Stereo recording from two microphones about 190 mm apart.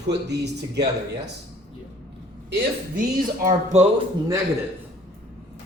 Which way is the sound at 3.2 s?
25° right (ahead or behind).